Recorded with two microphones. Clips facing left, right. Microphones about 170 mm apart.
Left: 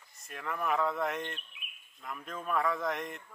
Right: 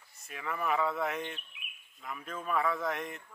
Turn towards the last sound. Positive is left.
turn(degrees=0)  # may be behind; listen again after turning